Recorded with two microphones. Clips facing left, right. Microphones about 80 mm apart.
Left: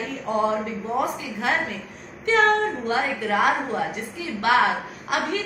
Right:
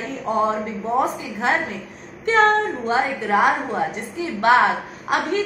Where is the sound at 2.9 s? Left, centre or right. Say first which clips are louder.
Right 5 dB; right.